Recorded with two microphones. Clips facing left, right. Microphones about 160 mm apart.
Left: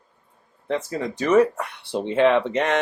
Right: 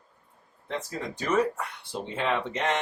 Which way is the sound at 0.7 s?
70° left (ahead or behind).